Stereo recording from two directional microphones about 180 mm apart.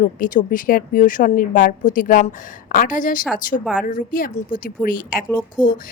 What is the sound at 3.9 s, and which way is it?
A woman's voice, 50° left (ahead or behind).